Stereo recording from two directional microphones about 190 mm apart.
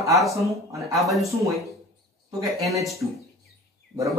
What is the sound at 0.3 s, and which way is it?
Speech, 15° right (ahead or behind).